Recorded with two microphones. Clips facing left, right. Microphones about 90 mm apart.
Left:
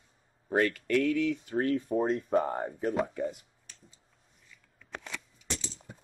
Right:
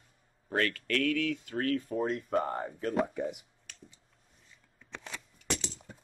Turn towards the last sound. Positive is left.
turn(degrees=-60)  # may be behind; listen again after turning